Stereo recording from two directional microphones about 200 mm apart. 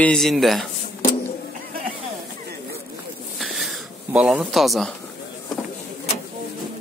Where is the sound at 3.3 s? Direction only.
Centre (ahead or behind).